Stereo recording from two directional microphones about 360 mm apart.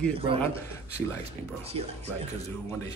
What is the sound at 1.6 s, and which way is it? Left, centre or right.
Speech, centre.